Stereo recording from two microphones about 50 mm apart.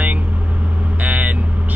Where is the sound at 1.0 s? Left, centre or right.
Right.